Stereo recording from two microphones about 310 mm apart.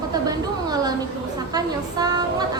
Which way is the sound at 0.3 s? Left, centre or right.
Centre.